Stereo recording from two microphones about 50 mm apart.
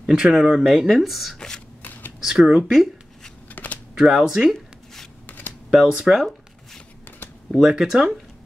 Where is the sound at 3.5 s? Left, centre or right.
Left.